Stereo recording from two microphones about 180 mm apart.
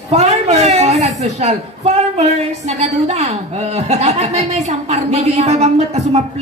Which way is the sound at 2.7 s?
35° right (ahead or behind).